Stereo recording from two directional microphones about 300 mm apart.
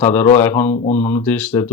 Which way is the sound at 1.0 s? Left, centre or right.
Centre.